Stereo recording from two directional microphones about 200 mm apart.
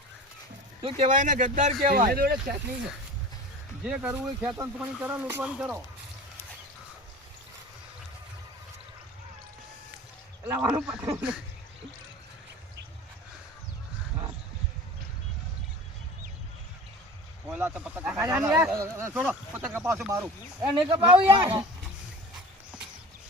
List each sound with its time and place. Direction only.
0.8 s speech: 25° right (ahead or behind)
1.1 s speech: 40° right (ahead or behind)
1.9 s speech: 50° right (ahead or behind)
3.8 s speech: 5° right (ahead or behind)
10.4 s speech: 10° right (ahead or behind)
17.5 s speech: 5° right (ahead or behind); by 21.6 s 25° right (ahead or behind)